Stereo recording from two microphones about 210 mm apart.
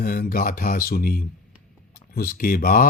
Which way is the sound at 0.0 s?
45° left (ahead or behind).